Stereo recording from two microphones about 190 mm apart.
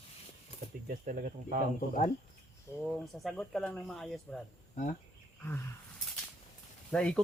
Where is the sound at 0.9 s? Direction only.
45° right (ahead or behind).